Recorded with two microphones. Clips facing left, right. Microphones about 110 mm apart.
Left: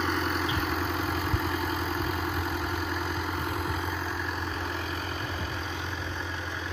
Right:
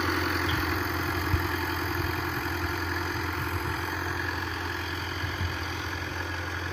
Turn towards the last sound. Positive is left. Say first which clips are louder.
# left 1 dB
turn(degrees=10)  # may be behind; listen again after turning